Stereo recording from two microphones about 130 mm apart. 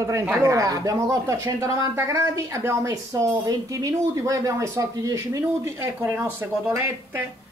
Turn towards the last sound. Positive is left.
turn(degrees=-20)  # may be behind; listen again after turning